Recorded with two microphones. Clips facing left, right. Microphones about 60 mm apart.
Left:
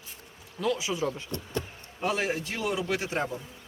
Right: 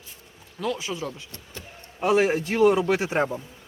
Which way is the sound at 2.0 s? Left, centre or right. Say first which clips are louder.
Right 8 dB; centre.